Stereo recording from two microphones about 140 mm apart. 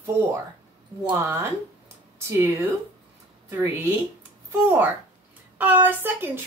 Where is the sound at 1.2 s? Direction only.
20° right (ahead or behind).